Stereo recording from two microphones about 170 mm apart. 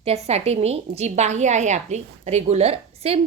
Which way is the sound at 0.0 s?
40° right (ahead or behind).